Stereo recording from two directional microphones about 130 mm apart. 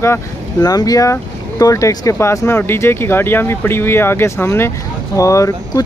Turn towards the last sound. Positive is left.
turn(degrees=25)  # may be behind; listen again after turning